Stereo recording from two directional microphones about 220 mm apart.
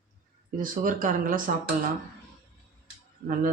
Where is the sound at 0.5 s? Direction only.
40° right (ahead or behind).